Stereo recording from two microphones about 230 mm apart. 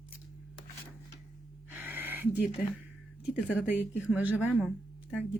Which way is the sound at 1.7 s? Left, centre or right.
Centre.